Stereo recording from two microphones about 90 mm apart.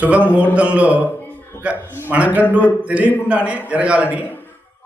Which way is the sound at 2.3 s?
25° left (ahead or behind).